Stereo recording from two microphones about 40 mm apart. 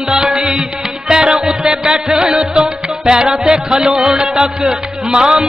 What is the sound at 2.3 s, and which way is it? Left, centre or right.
Music, right.